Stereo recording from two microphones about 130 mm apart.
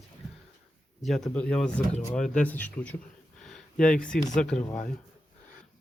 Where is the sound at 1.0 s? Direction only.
Centre (ahead or behind).